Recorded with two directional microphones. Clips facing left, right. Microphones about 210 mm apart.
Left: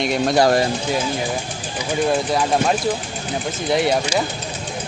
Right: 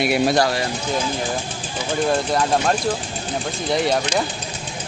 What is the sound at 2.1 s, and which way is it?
Speech, 5° left (ahead or behind).